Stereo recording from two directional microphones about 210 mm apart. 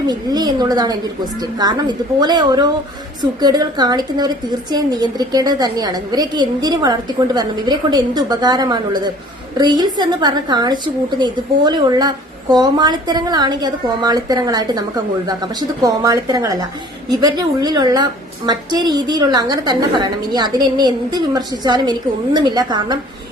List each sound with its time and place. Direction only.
0.1 s a woman's voice: 20° right (ahead or behind)